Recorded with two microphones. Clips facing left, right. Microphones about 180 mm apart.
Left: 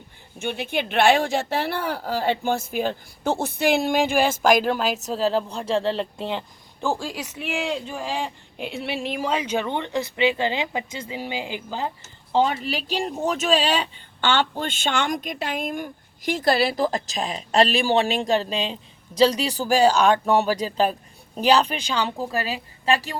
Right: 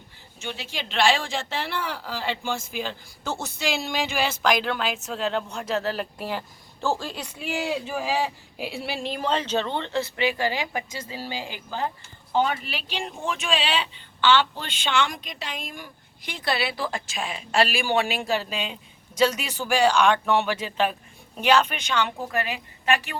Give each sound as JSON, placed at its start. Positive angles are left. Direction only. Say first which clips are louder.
{"t": 0.3, "sound": "speech", "louder": "left 8 dB", "side_deg": 55}
{"t": 7.3, "sound": "speech", "louder": "even", "side_deg": 0}
{"t": 12.3, "sound": "speech", "louder": "left 3 dB", "side_deg": 30}